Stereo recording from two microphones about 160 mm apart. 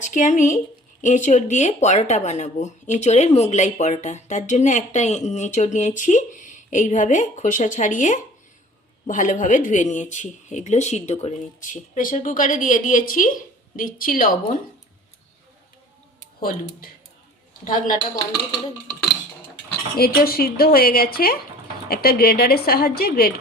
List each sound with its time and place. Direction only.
0.0 s speech: 50° left (ahead or behind)
17.7 s a woman's voice: 60° left (ahead or behind)
20.0 s a woman's voice: 70° left (ahead or behind)